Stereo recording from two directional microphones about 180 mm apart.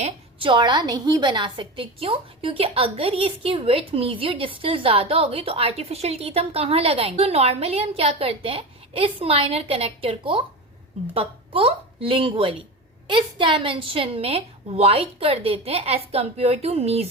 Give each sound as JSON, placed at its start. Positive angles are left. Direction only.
{"t": 0.0, "sound": "a woman's voice", "side_deg": -30}